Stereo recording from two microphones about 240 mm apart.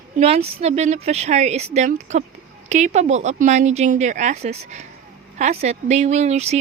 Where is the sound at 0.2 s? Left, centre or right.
Right.